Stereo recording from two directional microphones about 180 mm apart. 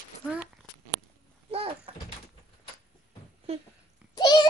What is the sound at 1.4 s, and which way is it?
Door, 30° right (ahead or behind).